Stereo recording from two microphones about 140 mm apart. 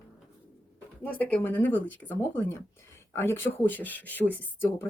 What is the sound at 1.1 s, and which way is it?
Speech, 10° left (ahead or behind).